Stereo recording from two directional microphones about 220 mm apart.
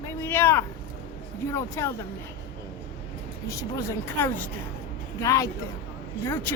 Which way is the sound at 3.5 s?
15° left (ahead or behind).